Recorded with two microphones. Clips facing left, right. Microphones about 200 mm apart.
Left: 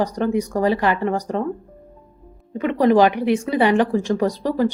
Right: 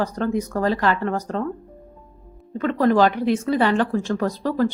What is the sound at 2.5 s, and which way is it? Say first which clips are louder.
A woman's voice: left 2 dB; 15° left (ahead or behind).